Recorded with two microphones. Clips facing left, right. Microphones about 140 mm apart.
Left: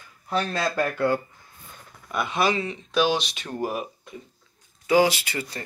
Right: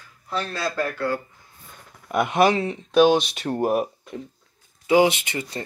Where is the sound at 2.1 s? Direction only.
65° right (ahead or behind).